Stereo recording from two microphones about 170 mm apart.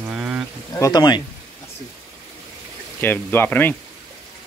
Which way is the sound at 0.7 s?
20° left (ahead or behind).